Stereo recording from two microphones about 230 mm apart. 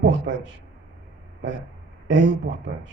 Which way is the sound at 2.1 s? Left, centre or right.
Right.